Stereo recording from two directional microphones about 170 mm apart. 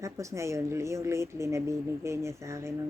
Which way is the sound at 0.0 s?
15° right (ahead or behind).